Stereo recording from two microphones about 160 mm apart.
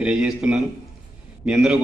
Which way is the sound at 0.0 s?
5° right (ahead or behind).